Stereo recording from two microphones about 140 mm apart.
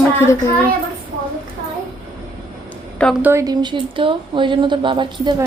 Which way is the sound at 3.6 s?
35° right (ahead or behind).